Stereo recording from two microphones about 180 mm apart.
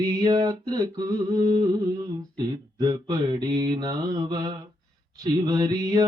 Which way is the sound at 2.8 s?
20° right (ahead or behind).